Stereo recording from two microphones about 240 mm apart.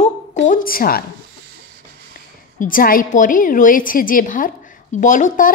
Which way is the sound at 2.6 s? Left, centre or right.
Left.